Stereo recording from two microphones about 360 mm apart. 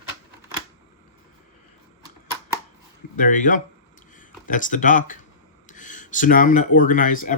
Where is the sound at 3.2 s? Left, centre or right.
Left.